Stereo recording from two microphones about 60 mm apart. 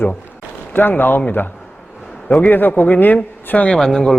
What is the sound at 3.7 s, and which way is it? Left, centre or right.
Speech, centre.